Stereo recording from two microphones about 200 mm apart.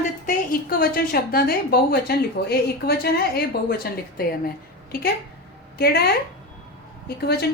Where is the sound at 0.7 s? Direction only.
45° left (ahead or behind).